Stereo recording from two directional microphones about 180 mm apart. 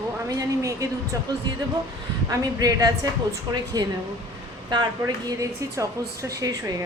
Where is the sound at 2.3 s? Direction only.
20° right (ahead or behind).